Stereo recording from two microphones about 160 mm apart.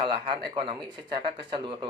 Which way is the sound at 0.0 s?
30° right (ahead or behind).